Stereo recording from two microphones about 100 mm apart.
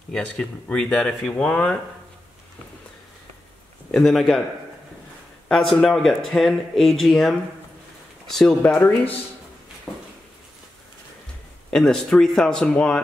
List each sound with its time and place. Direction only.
0.1 s speech: 10° left (ahead or behind)
3.9 s speech: centre (ahead or behind)
5.5 s speech: 5° left (ahead or behind)
9.9 s a sound: centre (ahead or behind)
11.7 s speech: 5° left (ahead or behind)